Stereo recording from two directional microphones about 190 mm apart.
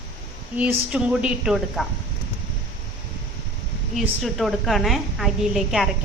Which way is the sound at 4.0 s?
Centre (ahead or behind).